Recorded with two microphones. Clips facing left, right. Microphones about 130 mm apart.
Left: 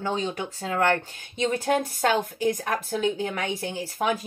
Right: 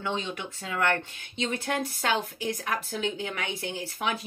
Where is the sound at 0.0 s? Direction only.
35° left (ahead or behind).